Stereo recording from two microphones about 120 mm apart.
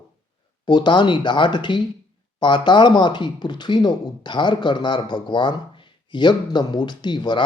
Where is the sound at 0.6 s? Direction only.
40° left (ahead or behind).